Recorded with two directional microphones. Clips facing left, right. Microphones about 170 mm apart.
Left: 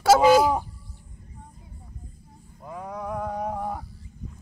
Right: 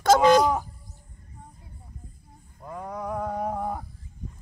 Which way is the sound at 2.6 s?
Centre (ahead or behind).